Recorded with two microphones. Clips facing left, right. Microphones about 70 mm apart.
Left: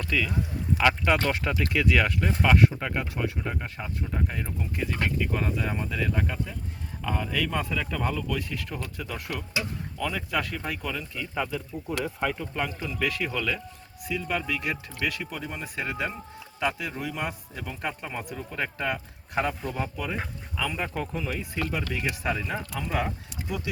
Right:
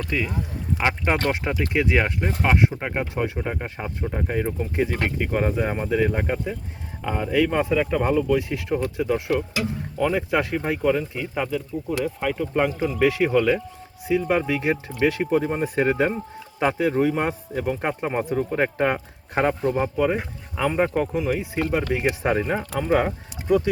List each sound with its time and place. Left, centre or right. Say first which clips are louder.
0.1 s speech: left 1 dB; right
7.0 s speech: right 7 dB; right
11.5 s speech: right 6 dB; centre
12.5 s speech: right 9 dB; right
19.8 s speech: right 9 dB; right
20.9 s speech: right 8 dB; centre
21.5 s speech: right 7 dB; right